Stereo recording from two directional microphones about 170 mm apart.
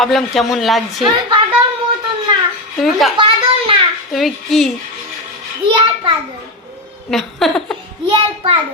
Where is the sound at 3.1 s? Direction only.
30° right (ahead or behind).